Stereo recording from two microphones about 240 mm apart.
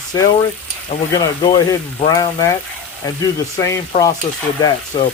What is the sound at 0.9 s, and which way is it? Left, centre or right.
Frying, left.